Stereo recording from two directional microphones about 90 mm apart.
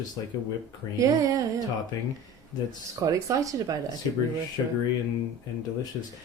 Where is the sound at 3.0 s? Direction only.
40° right (ahead or behind).